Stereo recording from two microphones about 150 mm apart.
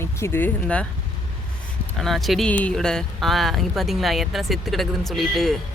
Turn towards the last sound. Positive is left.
turn(degrees=0)  # may be behind; listen again after turning